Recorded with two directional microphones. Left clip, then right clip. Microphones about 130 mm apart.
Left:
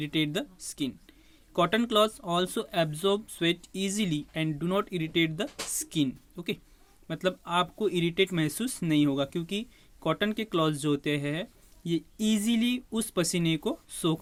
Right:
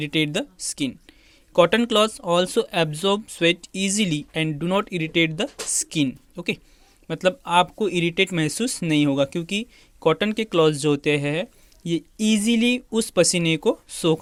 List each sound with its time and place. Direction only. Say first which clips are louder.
0.0 s speech: right 7 dB; 40° right (ahead or behind)